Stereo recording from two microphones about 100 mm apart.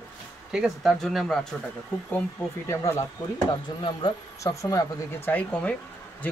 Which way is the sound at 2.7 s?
30° left (ahead or behind).